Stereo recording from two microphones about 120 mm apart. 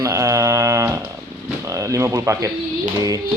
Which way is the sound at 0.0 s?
25° right (ahead or behind).